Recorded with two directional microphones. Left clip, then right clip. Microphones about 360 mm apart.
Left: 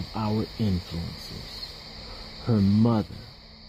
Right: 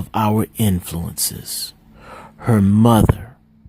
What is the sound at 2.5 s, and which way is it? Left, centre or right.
Speech, right.